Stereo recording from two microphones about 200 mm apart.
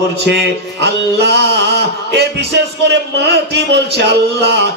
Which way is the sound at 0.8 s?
55° right (ahead or behind).